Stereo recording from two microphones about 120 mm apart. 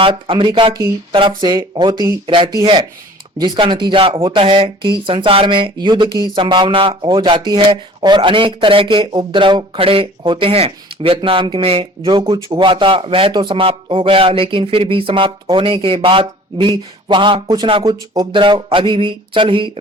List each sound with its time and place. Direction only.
0.0 s speech: 45° right (ahead or behind)